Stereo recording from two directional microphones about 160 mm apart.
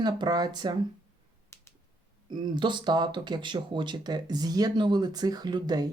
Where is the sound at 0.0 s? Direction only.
25° right (ahead or behind).